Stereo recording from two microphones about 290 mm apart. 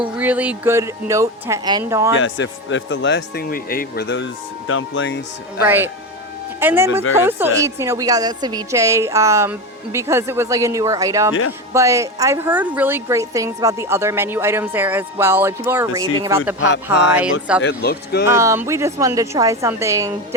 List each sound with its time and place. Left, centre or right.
0.2 s speech: centre
2.1 s speech: left
5.6 s speech: centre
16.6 s speech: left
18.3 s speech: centre